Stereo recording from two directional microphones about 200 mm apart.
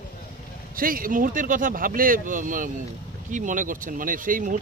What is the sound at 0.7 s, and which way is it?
Speech, 45° right (ahead or behind).